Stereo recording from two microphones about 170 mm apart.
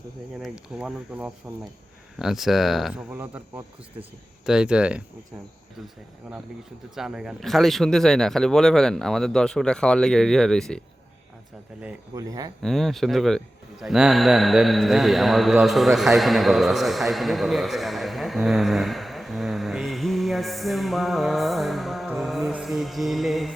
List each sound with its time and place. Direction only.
0.3 s speech: 5° right (ahead or behind)
6.3 s speech: 5° right (ahead or behind)
12.1 s speech: 20° right (ahead or behind)
12.6 s a man's voice: centre (ahead or behind)